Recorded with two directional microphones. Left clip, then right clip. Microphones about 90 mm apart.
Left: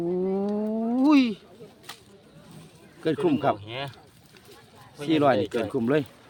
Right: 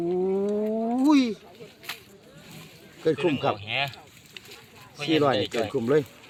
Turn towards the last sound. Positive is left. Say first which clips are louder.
# right 1 dB
turn(degrees=45)  # may be behind; listen again after turning